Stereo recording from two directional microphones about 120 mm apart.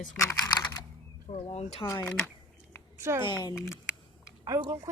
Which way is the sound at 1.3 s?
60° left (ahead or behind).